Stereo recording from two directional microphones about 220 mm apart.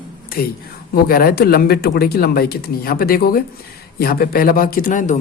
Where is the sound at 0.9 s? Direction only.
40° left (ahead or behind).